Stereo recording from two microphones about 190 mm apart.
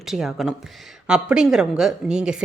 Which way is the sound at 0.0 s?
Centre (ahead or behind).